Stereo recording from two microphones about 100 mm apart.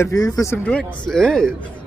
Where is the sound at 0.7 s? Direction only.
10° left (ahead or behind).